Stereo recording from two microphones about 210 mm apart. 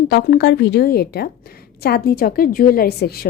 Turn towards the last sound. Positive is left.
turn(degrees=50)  # may be behind; listen again after turning